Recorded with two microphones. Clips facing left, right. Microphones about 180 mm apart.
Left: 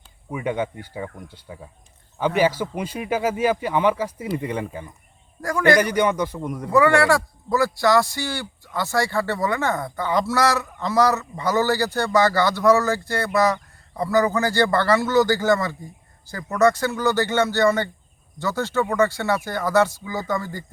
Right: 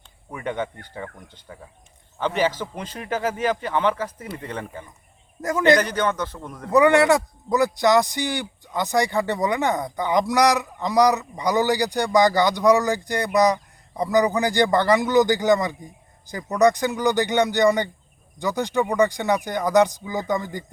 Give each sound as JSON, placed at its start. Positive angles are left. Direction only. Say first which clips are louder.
{"t": 0.3, "sound": "speech", "louder": "left 3 dB", "side_deg": 10}
{"t": 5.4, "sound": "a man's voice", "louder": "even", "side_deg": -20}
{"t": 5.8, "sound": "speech", "louder": "left 3 dB", "side_deg": 10}
{"t": 6.7, "sound": "speech", "louder": "right 1 dB", "side_deg": -20}